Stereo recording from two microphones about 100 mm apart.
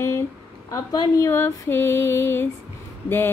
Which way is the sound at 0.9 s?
35° left (ahead or behind).